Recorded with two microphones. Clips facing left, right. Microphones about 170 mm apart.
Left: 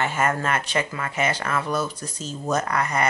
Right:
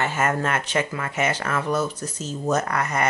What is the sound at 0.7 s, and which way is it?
Speech, 25° right (ahead or behind).